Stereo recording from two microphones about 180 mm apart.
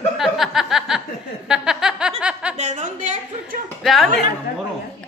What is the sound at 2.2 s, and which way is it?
Snicker, 5° right (ahead or behind).